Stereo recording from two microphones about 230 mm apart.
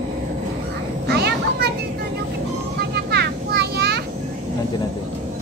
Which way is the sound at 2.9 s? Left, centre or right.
Right.